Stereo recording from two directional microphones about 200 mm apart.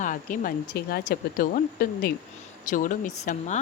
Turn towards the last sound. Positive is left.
turn(degrees=35)  # may be behind; listen again after turning